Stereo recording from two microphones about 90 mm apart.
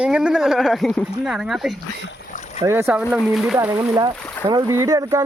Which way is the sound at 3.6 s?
20° right (ahead or behind).